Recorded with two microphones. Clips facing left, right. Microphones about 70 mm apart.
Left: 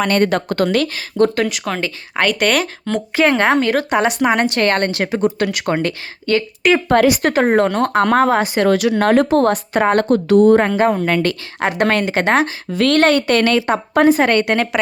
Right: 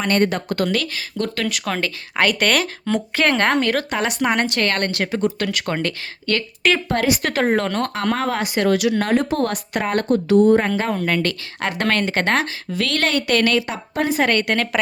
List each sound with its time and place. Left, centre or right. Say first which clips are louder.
0.0 s speech: left 3 dB; left
0.4 s speech: left 5 dB; left
1.5 s a woman's voice: left 2 dB; centre
3.8 s speech: left 6 dB; left
4.2 s speech: left 4 dB; centre
4.4 s speech: left 5 dB; left; by 6.7 s centre
6.9 s speech: left 7 dB; left
7.2 s speech: left 5 dB; left
9.5 s speech: left 8 dB; left
10.0 s speech: left 1 dB; left
10.7 s speech: left 5 dB; left
11.8 s speech: left 3 dB; centre
12.7 s speech: left 8 dB; left